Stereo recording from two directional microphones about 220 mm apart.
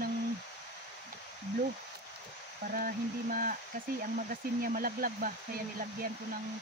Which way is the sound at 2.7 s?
40° right (ahead or behind).